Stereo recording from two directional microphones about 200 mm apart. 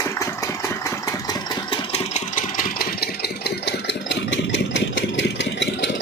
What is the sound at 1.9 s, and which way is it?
Engine, 40° left (ahead or behind).